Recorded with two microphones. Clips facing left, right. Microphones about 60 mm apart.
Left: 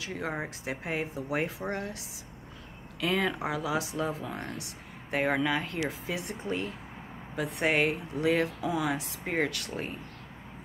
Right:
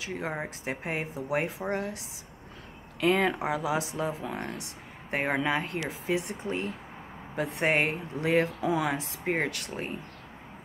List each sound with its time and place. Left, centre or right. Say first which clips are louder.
0.2 s speech: left 2 dB; right
3.0 s speech: right 4 dB; right